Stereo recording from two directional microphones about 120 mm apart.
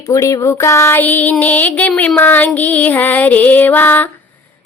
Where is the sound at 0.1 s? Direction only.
25° left (ahead or behind).